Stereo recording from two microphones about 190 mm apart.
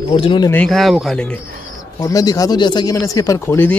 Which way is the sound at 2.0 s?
20° left (ahead or behind).